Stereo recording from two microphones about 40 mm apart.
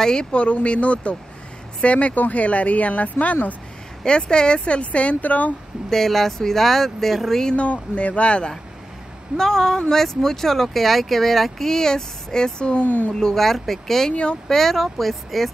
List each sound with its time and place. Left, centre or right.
0.0 s speech: centre; by 3.3 s left
4.0 s speech: left
5.9 s speech: centre
7.5 s speech: left
9.4 s speech: centre
12.8 s speech: left
13.1 s speech: centre